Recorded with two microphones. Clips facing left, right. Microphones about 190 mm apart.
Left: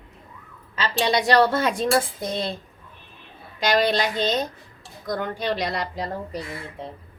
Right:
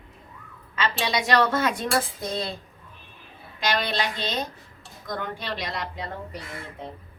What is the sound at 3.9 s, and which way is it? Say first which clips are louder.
Speech: left 5 dB; 40° left (ahead or behind).